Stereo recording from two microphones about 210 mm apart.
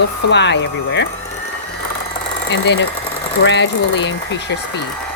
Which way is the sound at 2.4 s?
60° left (ahead or behind).